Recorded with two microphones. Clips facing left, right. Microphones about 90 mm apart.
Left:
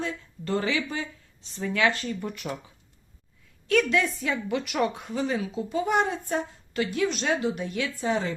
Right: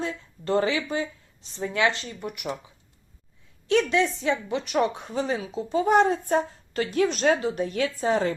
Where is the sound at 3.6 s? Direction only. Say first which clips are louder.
Right 1 dB; 25° right (ahead or behind).